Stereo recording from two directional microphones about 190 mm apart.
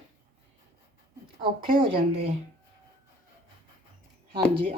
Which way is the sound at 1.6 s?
25° right (ahead or behind).